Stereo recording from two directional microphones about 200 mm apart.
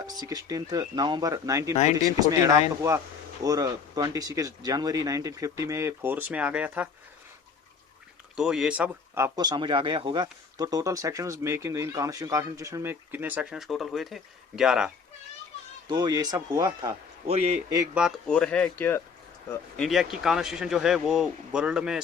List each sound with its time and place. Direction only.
0.0 s speech: 20° right (ahead or behind)
8.4 s speech: 5° right (ahead or behind)
15.9 s speech: 20° right (ahead or behind)
17.2 s a man's voice: 30° right (ahead or behind)
17.9 s speech: centre (ahead or behind)